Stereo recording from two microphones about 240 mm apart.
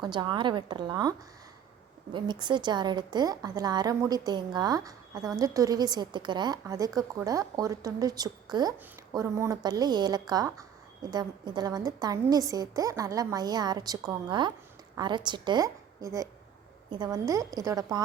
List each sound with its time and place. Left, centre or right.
0.0 s a woman's voice: centre
2.1 s a woman's voice: centre